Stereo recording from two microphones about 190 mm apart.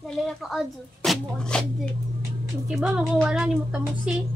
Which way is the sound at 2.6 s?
5° right (ahead or behind).